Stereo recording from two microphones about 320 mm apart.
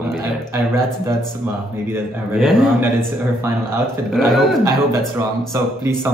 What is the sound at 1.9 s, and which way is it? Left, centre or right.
A man's voice, centre.